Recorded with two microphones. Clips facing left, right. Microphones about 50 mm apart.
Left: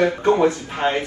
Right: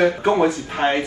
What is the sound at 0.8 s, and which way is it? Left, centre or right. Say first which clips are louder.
Speech: right 3 dB; right.